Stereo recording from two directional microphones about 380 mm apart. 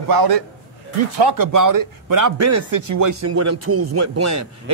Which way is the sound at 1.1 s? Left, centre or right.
Right.